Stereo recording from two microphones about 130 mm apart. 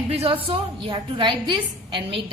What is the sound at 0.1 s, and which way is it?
A woman's voice, 45° right (ahead or behind).